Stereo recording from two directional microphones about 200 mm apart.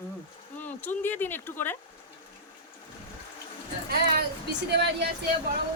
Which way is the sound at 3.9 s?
55° right (ahead or behind).